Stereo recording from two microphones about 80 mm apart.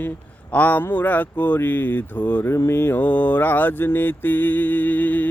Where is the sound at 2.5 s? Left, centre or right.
Left.